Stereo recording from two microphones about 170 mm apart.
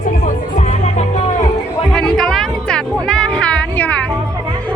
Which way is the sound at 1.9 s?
5° left (ahead or behind).